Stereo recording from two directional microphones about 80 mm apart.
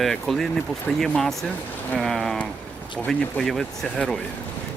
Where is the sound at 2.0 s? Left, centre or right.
Centre.